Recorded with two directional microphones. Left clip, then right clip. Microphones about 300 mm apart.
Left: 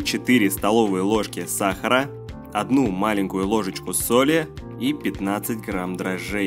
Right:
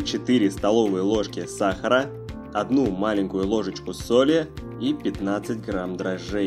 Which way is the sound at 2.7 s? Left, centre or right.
Left.